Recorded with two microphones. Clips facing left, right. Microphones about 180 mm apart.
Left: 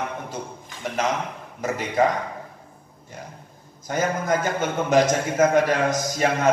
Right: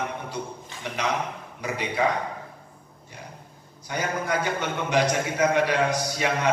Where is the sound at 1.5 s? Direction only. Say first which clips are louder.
Left 4 dB; 45° left (ahead or behind).